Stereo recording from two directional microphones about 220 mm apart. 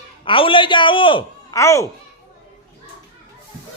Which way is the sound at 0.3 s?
25° left (ahead or behind).